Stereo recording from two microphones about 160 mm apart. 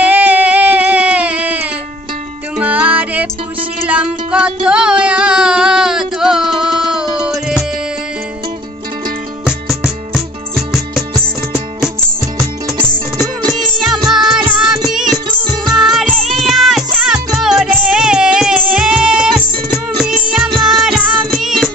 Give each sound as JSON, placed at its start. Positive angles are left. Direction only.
{"t": 0.0, "sound": "music", "side_deg": -10}
{"t": 9.4, "sound": "music", "side_deg": -5}
{"t": 13.5, "sound": "music", "side_deg": 0}